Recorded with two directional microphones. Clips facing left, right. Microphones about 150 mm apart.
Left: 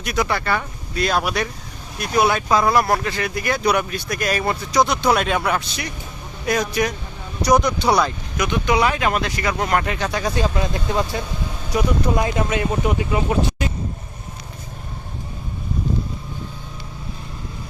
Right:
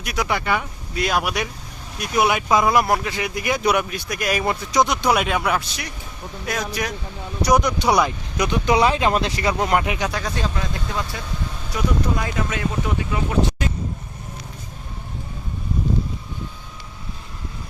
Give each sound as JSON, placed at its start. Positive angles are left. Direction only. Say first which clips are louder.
{"t": 0.0, "sound": "speech", "louder": "left 2 dB", "side_deg": -10}
{"t": 7.4, "sound": "speech", "louder": "left 1 dB", "side_deg": -10}
{"t": 8.4, "sound": "speech", "louder": "right 1 dB", "side_deg": -30}
{"t": 10.6, "sound": "speech", "louder": "left 5 dB", "side_deg": 25}